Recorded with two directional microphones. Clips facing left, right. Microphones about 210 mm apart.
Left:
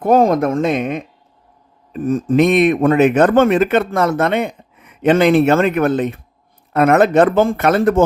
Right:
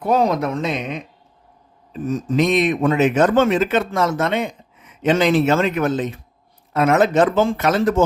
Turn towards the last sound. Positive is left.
turn(degrees=55)  # may be behind; listen again after turning